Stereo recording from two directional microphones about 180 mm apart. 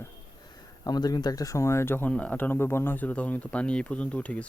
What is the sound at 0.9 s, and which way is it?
Speech, 20° left (ahead or behind).